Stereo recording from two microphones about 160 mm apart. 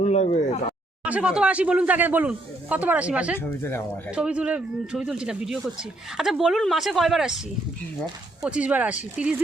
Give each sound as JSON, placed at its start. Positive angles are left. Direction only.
{"t": 0.0, "sound": "speech", "side_deg": 45}
{"t": 1.0, "sound": "speech", "side_deg": -10}
{"t": 3.3, "sound": "speech", "side_deg": 15}
{"t": 4.1, "sound": "speech", "side_deg": -5}
{"t": 8.4, "sound": "speech", "side_deg": -10}